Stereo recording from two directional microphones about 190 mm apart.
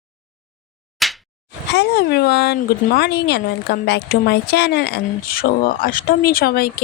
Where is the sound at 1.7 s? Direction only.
60° left (ahead or behind).